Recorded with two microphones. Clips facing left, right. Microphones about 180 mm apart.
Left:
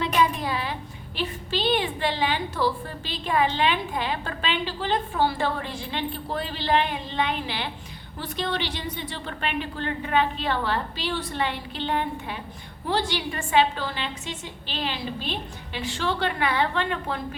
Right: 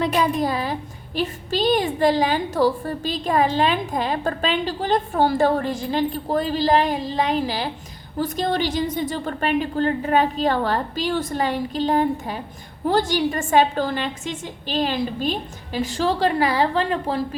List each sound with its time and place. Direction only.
0.0 s a woman's voice: 40° right (ahead or behind)